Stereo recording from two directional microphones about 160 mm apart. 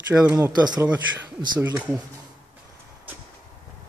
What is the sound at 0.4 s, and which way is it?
Speech, 20° right (ahead or behind).